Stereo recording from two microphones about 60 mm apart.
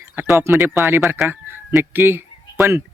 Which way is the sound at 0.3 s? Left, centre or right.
Right.